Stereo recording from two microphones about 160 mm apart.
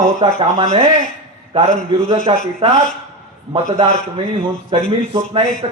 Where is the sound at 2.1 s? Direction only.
35° right (ahead or behind).